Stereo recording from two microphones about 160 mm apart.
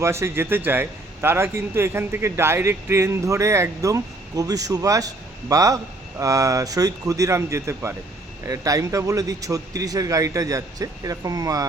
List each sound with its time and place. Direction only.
0.0 s a man's voice: 15° right (ahead or behind)